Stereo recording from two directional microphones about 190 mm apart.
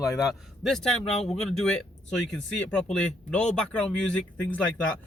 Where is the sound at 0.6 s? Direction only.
Centre (ahead or behind).